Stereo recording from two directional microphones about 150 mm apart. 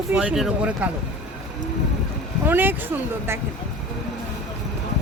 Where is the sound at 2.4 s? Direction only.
15° right (ahead or behind).